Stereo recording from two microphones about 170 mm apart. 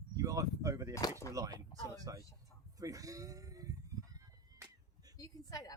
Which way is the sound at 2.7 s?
20° right (ahead or behind).